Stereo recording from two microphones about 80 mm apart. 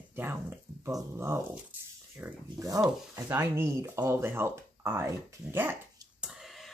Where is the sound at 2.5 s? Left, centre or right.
Right.